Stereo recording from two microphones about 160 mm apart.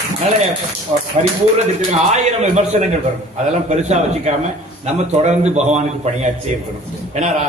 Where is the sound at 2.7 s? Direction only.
45° right (ahead or behind).